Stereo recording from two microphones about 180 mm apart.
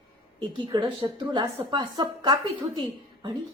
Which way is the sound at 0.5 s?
25° right (ahead or behind).